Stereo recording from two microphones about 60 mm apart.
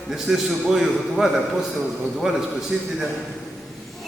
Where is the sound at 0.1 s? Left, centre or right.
Centre.